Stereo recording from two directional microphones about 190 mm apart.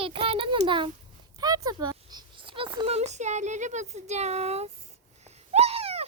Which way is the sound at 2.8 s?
35° right (ahead or behind).